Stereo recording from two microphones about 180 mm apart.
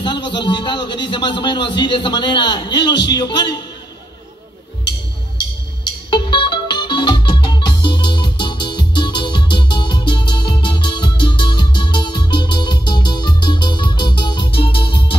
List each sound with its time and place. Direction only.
0.0 s a man's voice: 25° left (ahead or behind)
6.0 s music: 25° left (ahead or behind)